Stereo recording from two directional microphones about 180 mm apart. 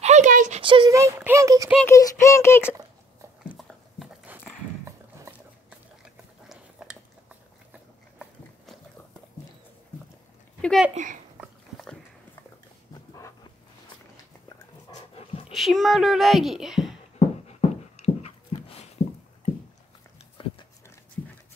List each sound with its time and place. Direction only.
0.0 s a sound: 40° right (ahead or behind)
0.6 s speech: 30° right (ahead or behind)
0.9 s speech: 15° right (ahead or behind)
1.9 s speech: 15° left (ahead or behind)
3.4 s dog: centre (ahead or behind)
6.5 s a sound: 5° right (ahead or behind)
10.6 s a sound: centre (ahead or behind)
11.3 s dog: centre (ahead or behind)
12.9 s a sound: 20° left (ahead or behind)
15.5 s a child's voice: centre (ahead or behind)
17.5 s dog: 35° left (ahead or behind)
20.4 s pig: 30° left (ahead or behind)